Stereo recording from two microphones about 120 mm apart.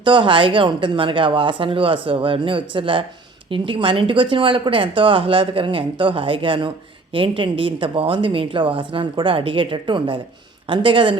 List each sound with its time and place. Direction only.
0.0 s speech: 40° right (ahead or behind)